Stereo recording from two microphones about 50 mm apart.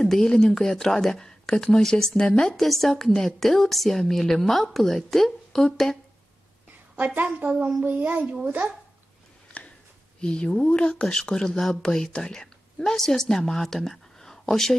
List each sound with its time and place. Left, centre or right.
0.0 s a woman's voice: centre
7.8 s a child's voice: right
10.2 s a woman's voice: centre